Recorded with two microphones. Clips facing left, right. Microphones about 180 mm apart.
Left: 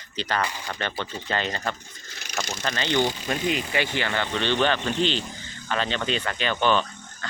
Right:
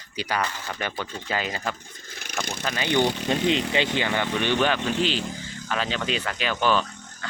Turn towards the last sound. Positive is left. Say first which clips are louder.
# even
turn(degrees=-5)  # may be behind; listen again after turning